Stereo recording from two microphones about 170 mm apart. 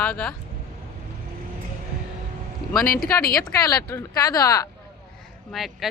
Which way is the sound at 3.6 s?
20° left (ahead or behind).